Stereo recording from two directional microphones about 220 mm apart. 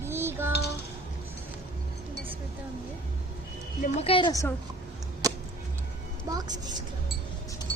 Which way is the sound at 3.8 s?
25° left (ahead or behind).